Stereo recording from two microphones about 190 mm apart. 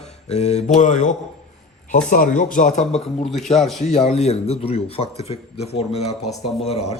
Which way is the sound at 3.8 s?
35° left (ahead or behind).